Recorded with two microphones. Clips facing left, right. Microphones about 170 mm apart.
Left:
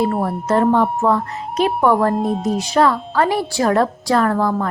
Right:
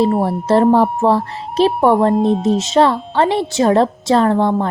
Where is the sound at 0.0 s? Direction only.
30° right (ahead or behind).